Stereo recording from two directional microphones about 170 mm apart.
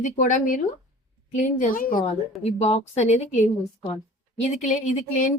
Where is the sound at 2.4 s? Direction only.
40° left (ahead or behind).